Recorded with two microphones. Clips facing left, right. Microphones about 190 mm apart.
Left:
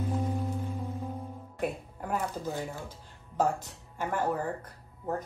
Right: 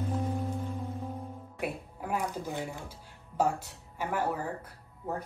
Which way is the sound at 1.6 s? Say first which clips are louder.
Left 2 dB; 10° right (ahead or behind).